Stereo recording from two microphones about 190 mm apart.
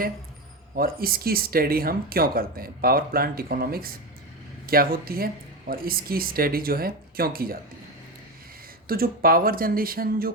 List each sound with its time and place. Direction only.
0.8 s speech: 50° right (ahead or behind)
8.9 s speech: 50° right (ahead or behind)